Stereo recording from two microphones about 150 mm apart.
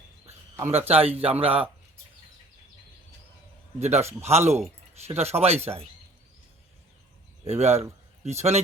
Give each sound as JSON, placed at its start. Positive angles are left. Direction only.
{"t": 0.3, "sound": "a sound", "side_deg": -45}
{"t": 0.9, "sound": "speech", "side_deg": -40}
{"t": 3.8, "sound": "speech", "side_deg": -45}
{"t": 7.4, "sound": "speech", "side_deg": -45}